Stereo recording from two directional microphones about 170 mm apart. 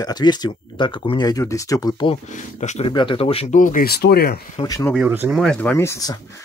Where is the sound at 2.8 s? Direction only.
30° left (ahead or behind).